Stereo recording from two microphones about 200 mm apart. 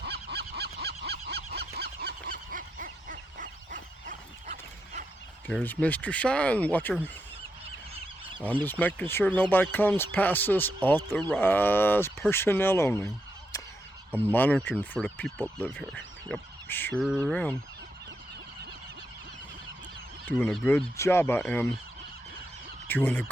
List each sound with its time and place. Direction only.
0.0 s goose: 55° right (ahead or behind)
5.5 s speech: 5° left (ahead or behind)
7.6 s goose: 30° right (ahead or behind)
8.6 s speech: 10° left (ahead or behind)
14.1 s speech: 10° right (ahead or behind)
14.3 s speech: 10° left (ahead or behind)
20.2 s speech: 5° left (ahead or behind)
22.9 s speech: 10° left (ahead or behind)